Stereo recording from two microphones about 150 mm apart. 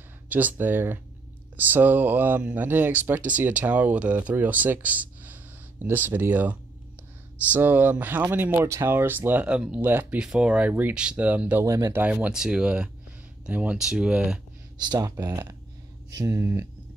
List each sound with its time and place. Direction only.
0.3 s speech: 10° right (ahead or behind)
11.6 s speech: 20° right (ahead or behind)
14.8 s speech: 25° right (ahead or behind)